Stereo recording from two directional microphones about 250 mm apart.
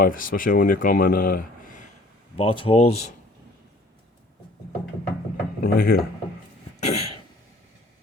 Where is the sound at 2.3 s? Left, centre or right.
Left.